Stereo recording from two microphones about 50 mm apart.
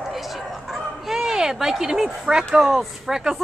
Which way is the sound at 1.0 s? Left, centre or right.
Centre.